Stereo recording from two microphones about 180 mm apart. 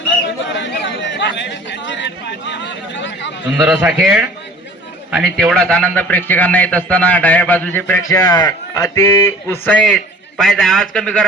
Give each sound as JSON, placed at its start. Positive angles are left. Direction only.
{"t": 0.6, "sound": "chatter", "side_deg": 90}
{"t": 3.7, "sound": "a man's voice", "side_deg": -10}
{"t": 9.6, "sound": "a man's voice", "side_deg": 5}